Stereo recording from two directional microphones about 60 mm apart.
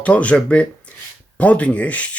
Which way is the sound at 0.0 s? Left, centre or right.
Left.